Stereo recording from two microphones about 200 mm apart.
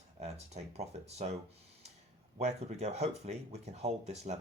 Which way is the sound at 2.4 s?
35° right (ahead or behind).